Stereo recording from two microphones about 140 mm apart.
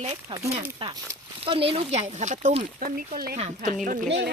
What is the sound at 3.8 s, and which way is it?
Speech, 75° right (ahead or behind).